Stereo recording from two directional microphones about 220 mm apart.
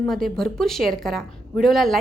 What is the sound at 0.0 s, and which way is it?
Speech, centre (ahead or behind).